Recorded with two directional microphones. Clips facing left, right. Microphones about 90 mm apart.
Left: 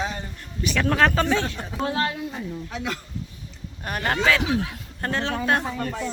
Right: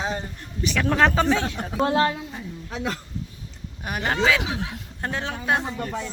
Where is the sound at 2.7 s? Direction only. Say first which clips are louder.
Right 3 dB; 30° right (ahead or behind).